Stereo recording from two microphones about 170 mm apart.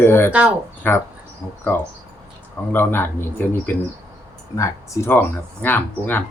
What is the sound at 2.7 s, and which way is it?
Speech, 10° left (ahead or behind).